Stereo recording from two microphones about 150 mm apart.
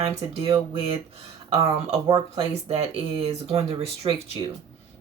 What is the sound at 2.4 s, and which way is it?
Speech, 40° right (ahead or behind).